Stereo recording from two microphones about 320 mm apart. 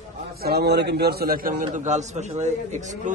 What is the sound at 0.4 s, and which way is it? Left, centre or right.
A man's voice, right.